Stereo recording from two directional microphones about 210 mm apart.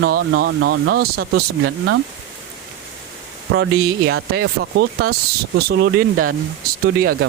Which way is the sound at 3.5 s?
55° right (ahead or behind).